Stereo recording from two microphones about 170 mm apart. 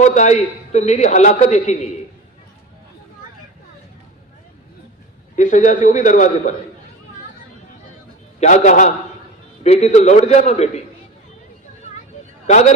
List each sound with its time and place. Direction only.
0.0 s a man's voice: 45° left (ahead or behind)
5.4 s a man's voice: 45° left (ahead or behind)
8.4 s a man's voice: 45° left (ahead or behind)
12.5 s a man's voice: 45° left (ahead or behind)